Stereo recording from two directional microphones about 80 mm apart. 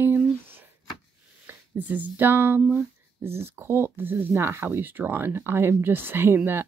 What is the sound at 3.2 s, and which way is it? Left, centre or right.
Speech, right.